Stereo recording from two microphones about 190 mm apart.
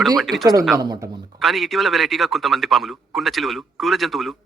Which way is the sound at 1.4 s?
Centre (ahead or behind).